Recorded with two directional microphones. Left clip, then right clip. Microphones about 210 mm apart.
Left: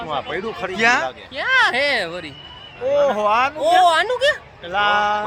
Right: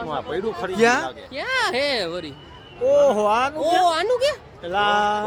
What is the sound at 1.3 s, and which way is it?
Speech, 5° right (ahead or behind).